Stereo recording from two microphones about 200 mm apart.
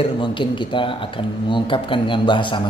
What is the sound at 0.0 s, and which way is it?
Speech, 25° left (ahead or behind).